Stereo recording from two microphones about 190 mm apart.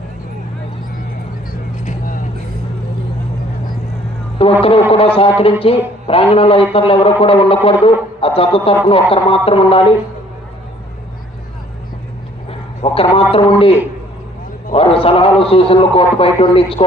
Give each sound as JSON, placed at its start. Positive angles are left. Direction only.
{"t": 1.8, "sound": "vehicle", "side_deg": 40}
{"t": 4.6, "sound": "a man's voice", "side_deg": 30}
{"t": 12.5, "sound": "a sound", "side_deg": 30}
{"t": 13.3, "sound": "a man's voice", "side_deg": 30}